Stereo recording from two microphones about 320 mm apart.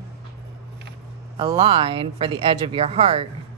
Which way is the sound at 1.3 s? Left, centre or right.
Centre.